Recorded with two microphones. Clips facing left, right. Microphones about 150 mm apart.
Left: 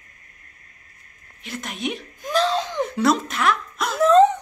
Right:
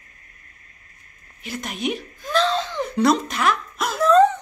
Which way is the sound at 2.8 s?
Centre (ahead or behind).